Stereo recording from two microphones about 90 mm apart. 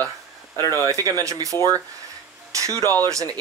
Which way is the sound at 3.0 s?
45° right (ahead or behind).